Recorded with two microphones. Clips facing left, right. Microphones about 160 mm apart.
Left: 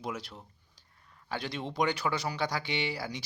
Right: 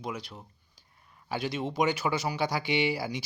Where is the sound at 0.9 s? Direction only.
15° right (ahead or behind).